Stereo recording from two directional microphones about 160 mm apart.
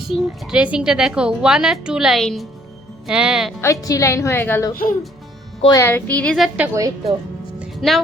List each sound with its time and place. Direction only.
0.1 s a woman's voice: 5° right (ahead or behind)
3.6 s a woman's voice: 20° left (ahead or behind)
4.7 s speech: 60° left (ahead or behind)
5.6 s speech: 20° left (ahead or behind)
6.3 s a woman's voice: centre (ahead or behind)
7.6 s music: centre (ahead or behind)